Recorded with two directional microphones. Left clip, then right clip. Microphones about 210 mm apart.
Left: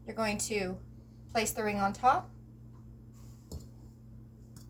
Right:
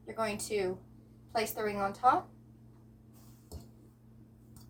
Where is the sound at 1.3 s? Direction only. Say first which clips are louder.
Left 1 dB; 15° right (ahead or behind).